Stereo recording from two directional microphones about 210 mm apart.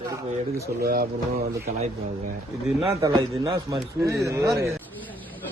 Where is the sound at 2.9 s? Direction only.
15° right (ahead or behind).